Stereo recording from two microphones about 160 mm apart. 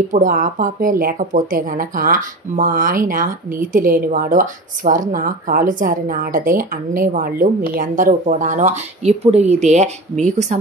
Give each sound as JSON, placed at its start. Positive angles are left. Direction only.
{"t": 0.1, "sound": "speech", "side_deg": -55}